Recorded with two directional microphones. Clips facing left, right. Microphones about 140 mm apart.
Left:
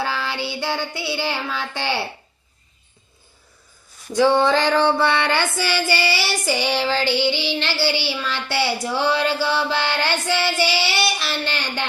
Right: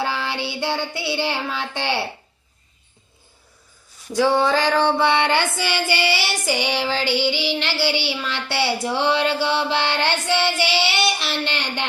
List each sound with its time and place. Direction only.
0.0 s child singing: 25° right (ahead or behind)
4.1 s a sound: 5° right (ahead or behind)
4.9 s child singing: 20° right (ahead or behind)